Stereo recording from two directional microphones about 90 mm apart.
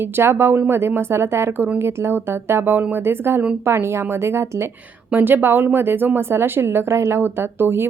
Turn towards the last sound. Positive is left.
turn(degrees=-25)  # may be behind; listen again after turning